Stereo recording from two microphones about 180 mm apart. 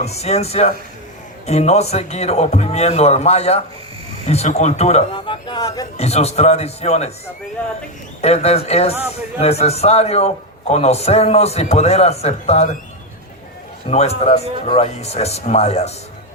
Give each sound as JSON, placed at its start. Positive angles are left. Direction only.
{"t": 0.0, "sound": "a man's voice", "side_deg": 35}
{"t": 6.0, "sound": "a man's voice", "side_deg": 35}
{"t": 8.2, "sound": "a man's voice", "side_deg": 35}
{"t": 13.8, "sound": "a man's voice", "side_deg": 35}